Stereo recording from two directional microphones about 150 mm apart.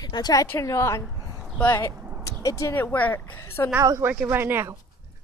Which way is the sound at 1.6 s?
15° left (ahead or behind).